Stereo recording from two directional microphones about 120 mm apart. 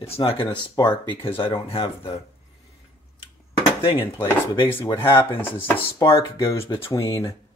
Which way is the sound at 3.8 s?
45° left (ahead or behind).